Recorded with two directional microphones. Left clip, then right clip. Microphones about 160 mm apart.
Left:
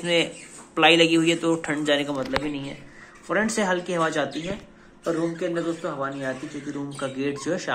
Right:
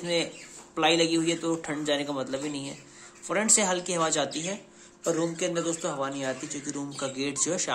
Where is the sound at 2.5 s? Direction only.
40° right (ahead or behind).